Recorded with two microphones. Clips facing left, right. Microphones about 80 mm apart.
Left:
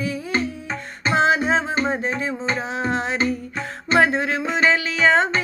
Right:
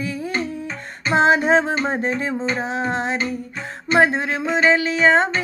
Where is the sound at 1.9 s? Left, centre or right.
Right.